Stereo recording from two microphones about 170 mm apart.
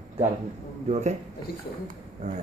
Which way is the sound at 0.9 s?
40° right (ahead or behind).